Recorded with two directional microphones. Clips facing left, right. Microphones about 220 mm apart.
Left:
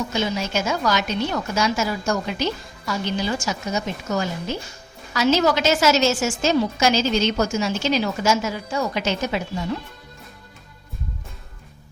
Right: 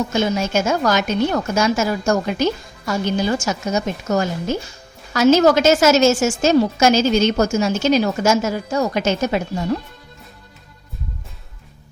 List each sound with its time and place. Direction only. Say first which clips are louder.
0.1 s a woman's voice: right 5 dB; 50° right (ahead or behind)